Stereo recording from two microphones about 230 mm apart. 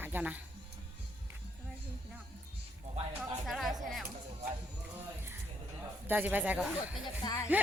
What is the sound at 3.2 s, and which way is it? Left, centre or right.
Music, centre.